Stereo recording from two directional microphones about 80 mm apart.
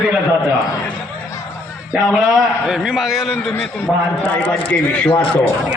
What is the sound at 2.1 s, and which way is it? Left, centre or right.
A man's voice, centre.